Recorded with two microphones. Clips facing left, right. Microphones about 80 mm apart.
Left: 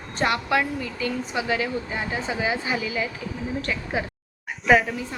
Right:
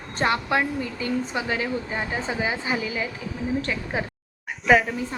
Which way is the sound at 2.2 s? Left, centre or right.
Right.